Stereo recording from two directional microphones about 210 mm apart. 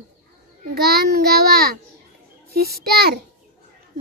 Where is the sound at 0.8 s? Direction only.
50° right (ahead or behind).